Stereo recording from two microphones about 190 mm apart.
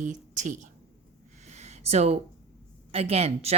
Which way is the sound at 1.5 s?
35° right (ahead or behind).